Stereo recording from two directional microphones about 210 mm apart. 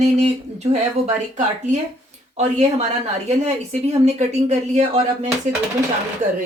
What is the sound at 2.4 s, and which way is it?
Speech, 35° right (ahead or behind).